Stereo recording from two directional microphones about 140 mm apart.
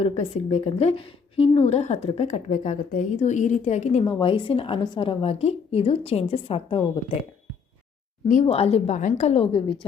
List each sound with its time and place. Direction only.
0.0 s a woman's voice: 50° left (ahead or behind)
4.0 s a woman's voice: 35° left (ahead or behind)
8.4 s a woman's voice: 45° left (ahead or behind)
9.0 s a woman's voice: 65° left (ahead or behind); by 9.8 s 35° left (ahead or behind)